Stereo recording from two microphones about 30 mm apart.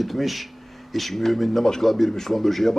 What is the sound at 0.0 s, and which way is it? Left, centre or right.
Speech, centre.